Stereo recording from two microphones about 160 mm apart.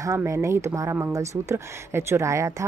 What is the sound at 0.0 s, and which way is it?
Speech, 20° right (ahead or behind).